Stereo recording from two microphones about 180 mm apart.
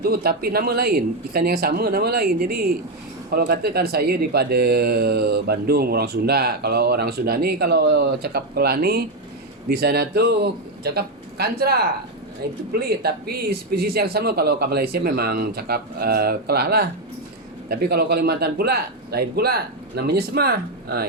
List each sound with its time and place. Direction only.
0.0 s speech: 60° right (ahead or behind)